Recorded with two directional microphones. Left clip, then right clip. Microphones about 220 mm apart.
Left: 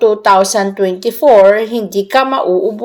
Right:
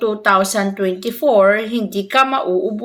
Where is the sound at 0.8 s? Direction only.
15° left (ahead or behind).